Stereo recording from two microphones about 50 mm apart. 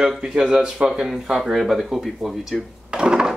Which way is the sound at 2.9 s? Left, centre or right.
Centre.